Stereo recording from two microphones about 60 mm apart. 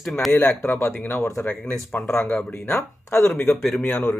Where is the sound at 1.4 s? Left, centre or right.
Left.